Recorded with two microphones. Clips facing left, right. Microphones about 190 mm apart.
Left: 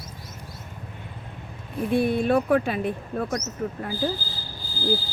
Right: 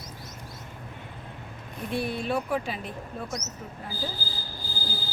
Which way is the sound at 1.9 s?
55° left (ahead or behind).